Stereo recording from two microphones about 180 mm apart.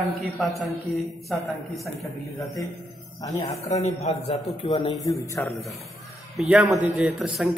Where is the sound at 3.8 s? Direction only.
40° left (ahead or behind).